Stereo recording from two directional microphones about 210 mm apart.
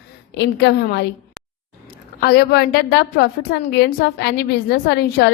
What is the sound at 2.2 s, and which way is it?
A woman's voice, 50° left (ahead or behind).